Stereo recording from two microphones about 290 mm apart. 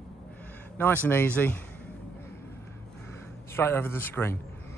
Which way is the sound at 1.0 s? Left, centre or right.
Centre.